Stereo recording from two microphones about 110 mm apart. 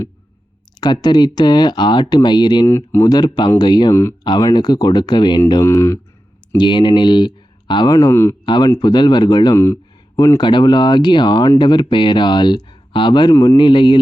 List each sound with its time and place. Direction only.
0.8 s speech: 40° left (ahead or behind)
2.6 s speech: 25° left (ahead or behind)
3.1 s speech: 40° left (ahead or behind)
5.6 s speech: 25° left (ahead or behind)
6.6 s speech: 45° left (ahead or behind)
7.9 s speech: 25° left (ahead or behind)
8.4 s speech: 45° left (ahead or behind)
13.3 s speech: 30° left (ahead or behind)
13.6 s speech: 45° left (ahead or behind)